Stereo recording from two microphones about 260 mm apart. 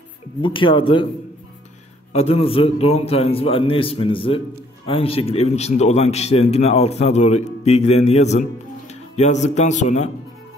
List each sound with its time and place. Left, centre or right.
0.4 s speech: centre
2.1 s speech: left